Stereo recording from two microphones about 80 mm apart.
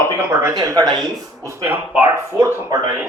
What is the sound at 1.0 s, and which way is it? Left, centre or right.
Speech, right.